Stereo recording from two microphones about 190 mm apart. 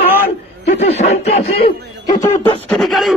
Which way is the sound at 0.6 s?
35° left (ahead or behind).